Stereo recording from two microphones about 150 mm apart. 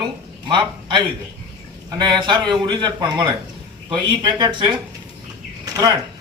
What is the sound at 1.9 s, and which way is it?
Speech, 30° right (ahead or behind).